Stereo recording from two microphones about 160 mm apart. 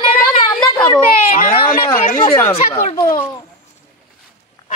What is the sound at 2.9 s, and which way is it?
Speech, 25° left (ahead or behind).